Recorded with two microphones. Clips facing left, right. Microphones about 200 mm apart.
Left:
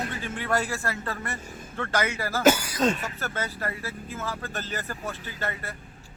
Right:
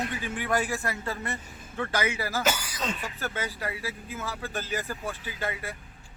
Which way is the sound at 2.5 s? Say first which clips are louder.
Left 9 dB; 50° left (ahead or behind).